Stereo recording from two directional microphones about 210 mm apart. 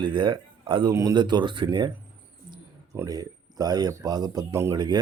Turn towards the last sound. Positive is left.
turn(degrees=-20)  # may be behind; listen again after turning